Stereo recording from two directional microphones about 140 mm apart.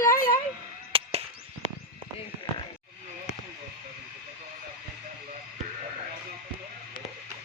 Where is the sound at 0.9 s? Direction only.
40° right (ahead or behind).